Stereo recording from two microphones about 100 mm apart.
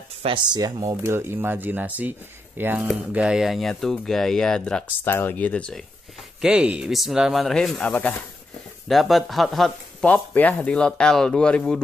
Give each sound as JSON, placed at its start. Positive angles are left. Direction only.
{"t": 0.5, "sound": "speech", "side_deg": -40}
{"t": 1.0, "sound": "speech", "side_deg": -25}
{"t": 3.1, "sound": "speech", "side_deg": -10}
{"t": 5.0, "sound": "speech", "side_deg": 20}
{"t": 6.4, "sound": "speech", "side_deg": -10}
{"t": 7.9, "sound": "speech", "side_deg": 15}
{"t": 8.8, "sound": "speech", "side_deg": 0}
{"t": 10.0, "sound": "speech", "side_deg": 15}